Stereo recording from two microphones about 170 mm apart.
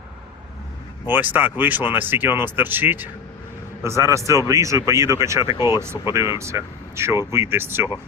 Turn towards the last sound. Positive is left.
turn(degrees=-15)  # may be behind; listen again after turning